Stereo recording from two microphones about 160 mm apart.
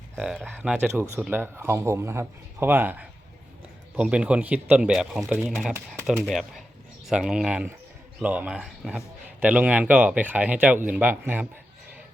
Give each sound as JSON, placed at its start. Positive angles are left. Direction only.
{"t": 0.4, "sound": "speech", "side_deg": -10}